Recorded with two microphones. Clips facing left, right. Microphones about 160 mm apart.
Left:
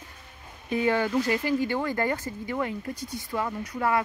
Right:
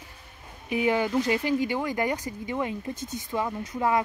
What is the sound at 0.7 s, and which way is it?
Speech, 15° right (ahead or behind).